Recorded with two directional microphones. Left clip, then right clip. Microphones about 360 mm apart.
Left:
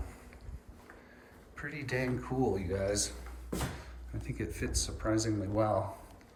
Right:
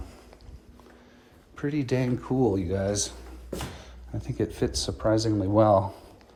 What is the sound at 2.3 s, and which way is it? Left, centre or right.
Speech, right.